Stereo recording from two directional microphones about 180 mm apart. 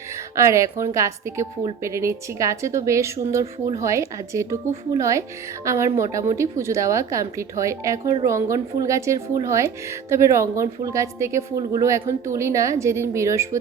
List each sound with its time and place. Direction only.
0.3 s speech: 15° right (ahead or behind)